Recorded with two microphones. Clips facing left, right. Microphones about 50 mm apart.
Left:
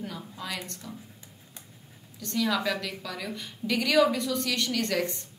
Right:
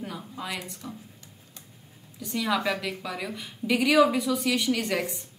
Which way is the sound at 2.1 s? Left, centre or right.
Centre.